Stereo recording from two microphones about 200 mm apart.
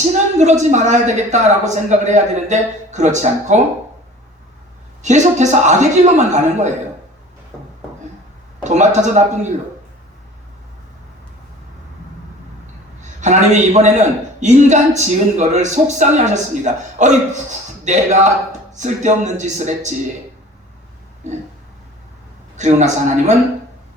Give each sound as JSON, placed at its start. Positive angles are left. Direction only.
{"t": 0.3, "sound": "a man's voice", "side_deg": -35}
{"t": 5.0, "sound": "a man's voice", "side_deg": -35}
{"t": 8.6, "sound": "a man's voice", "side_deg": -35}
{"t": 13.0, "sound": "a man's voice", "side_deg": -35}
{"t": 22.5, "sound": "a man's voice", "side_deg": -35}